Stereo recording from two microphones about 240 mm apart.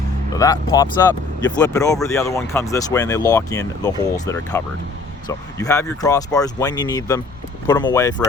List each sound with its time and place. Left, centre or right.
0.3 s speech: centre